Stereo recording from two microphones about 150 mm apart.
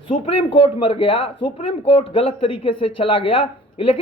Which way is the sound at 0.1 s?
35° left (ahead or behind).